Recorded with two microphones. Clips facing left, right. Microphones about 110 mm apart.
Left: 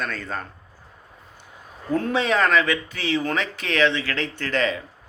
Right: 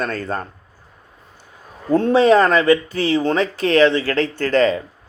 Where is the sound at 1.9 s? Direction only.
35° right (ahead or behind).